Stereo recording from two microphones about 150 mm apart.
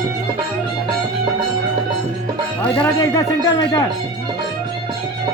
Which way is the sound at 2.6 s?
5° left (ahead or behind).